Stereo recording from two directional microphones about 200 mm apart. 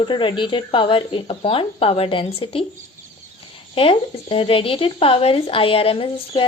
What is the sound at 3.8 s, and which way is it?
Speech, 30° left (ahead or behind).